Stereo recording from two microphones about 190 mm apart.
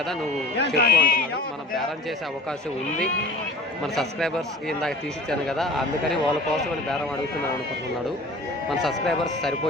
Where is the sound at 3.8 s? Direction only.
Centre (ahead or behind).